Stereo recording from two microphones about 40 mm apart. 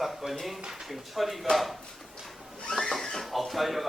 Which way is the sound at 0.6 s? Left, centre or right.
Centre.